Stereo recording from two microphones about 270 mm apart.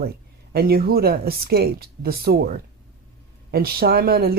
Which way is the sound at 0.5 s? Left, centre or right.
Right.